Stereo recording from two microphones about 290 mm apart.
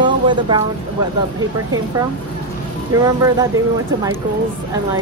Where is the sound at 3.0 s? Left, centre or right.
Centre.